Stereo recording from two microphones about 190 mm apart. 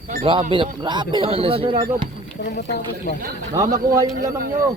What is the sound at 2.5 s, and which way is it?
Speech, 55° left (ahead or behind).